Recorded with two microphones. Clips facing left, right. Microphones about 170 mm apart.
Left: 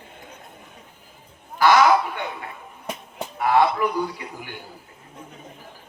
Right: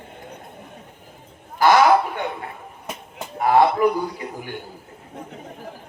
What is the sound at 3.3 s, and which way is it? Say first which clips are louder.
Speech: right 3 dB; 40° right (ahead or behind).